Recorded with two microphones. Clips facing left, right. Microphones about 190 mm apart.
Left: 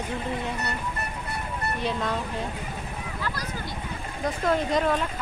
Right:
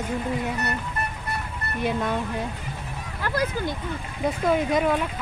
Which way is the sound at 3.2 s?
50° right (ahead or behind).